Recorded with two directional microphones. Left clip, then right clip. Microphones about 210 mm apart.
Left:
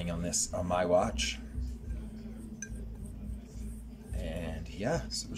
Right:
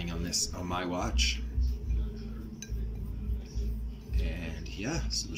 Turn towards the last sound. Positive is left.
turn(degrees=55)  # may be behind; listen again after turning